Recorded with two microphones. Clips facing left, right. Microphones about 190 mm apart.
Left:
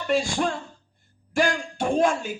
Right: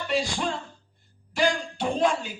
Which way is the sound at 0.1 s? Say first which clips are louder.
Left 4 dB; 50° left (ahead or behind).